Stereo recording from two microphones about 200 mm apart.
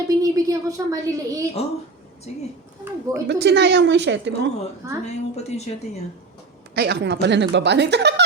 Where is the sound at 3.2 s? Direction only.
60° right (ahead or behind).